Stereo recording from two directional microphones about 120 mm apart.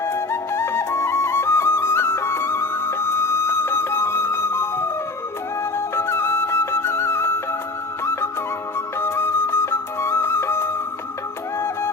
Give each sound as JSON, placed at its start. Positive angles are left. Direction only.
{"t": 0.0, "sound": "music", "side_deg": 20}
{"t": 5.7, "sound": "flute", "side_deg": 20}
{"t": 8.0, "sound": "music", "side_deg": 20}